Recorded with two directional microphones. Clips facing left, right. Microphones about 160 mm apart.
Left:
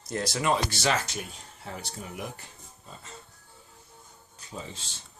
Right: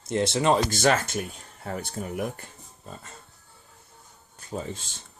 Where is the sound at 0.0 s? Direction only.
25° right (ahead or behind).